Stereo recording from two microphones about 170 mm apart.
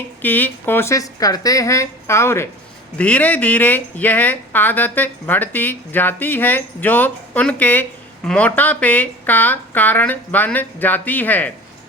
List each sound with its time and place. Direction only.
0.2 s speech: 10° left (ahead or behind)